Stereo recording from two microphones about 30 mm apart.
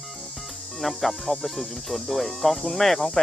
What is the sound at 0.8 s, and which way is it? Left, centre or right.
Speech, centre.